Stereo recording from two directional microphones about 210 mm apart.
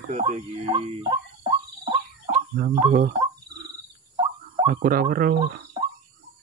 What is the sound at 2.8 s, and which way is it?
Speech, 40° right (ahead or behind).